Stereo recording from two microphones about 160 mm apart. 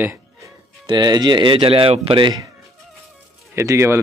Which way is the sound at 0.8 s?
25° right (ahead or behind).